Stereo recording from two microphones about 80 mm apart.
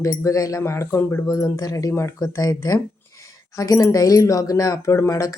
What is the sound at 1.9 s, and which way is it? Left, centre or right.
Speech, left.